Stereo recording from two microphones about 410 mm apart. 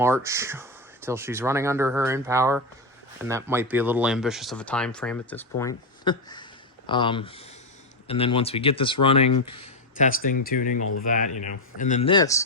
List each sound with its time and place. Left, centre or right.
0.0 s speech: centre